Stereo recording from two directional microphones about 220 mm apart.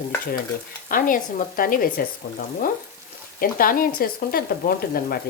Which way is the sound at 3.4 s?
40° left (ahead or behind).